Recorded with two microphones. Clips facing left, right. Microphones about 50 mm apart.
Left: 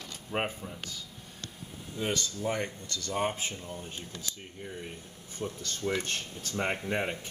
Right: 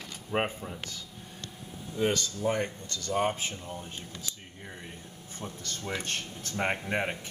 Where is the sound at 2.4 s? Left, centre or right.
Centre.